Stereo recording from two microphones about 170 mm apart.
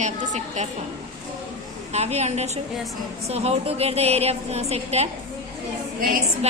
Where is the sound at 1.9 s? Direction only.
40° right (ahead or behind).